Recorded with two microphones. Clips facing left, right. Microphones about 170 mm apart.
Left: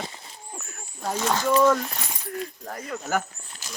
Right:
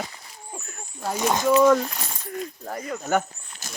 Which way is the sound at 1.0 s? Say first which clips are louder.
Right 2 dB; 15° right (ahead or behind).